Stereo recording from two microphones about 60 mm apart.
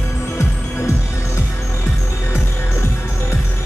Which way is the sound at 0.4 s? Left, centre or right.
Left.